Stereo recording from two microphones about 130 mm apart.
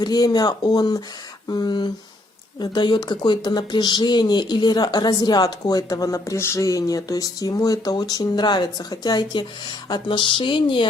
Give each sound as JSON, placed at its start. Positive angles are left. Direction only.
{"t": 0.0, "sound": "speech", "side_deg": 30}